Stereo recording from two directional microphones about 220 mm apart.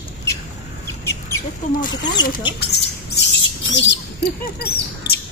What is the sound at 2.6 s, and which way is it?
Speech, 50° left (ahead or behind).